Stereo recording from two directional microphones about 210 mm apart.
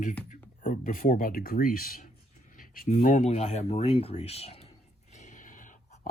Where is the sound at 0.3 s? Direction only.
40° left (ahead or behind).